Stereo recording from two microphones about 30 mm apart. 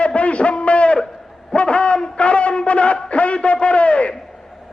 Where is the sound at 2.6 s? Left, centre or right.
Left.